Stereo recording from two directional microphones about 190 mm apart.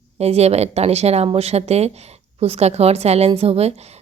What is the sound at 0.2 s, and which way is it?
A woman's voice, 35° right (ahead or behind).